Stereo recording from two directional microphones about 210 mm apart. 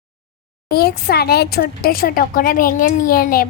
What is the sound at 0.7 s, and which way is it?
Speech, 45° left (ahead or behind).